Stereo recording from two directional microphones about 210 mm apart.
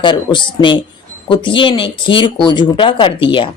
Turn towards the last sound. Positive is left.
turn(degrees=25)  # may be behind; listen again after turning